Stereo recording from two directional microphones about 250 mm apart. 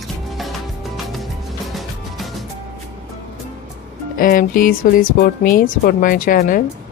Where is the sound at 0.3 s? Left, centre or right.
Centre.